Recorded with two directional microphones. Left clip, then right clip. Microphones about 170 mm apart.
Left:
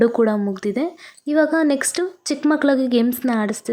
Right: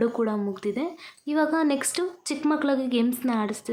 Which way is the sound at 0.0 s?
30° left (ahead or behind).